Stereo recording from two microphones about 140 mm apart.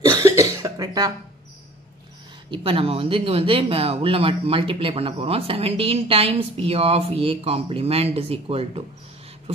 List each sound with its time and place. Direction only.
0.0 s cough: 25° right (ahead or behind)
2.5 s speech: 40° right (ahead or behind)